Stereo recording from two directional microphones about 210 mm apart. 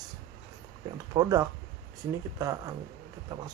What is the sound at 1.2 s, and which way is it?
Speech, 15° right (ahead or behind).